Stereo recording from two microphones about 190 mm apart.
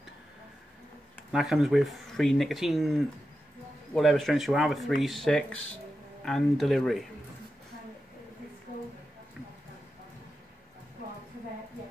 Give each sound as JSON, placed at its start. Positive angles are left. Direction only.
{"t": 1.3, "sound": "speech", "side_deg": 0}